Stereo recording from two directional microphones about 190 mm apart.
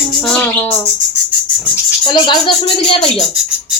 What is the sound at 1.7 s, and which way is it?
Speech, 20° left (ahead or behind).